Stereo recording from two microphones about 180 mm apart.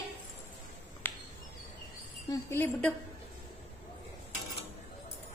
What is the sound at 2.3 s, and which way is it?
Speech, 10° left (ahead or behind).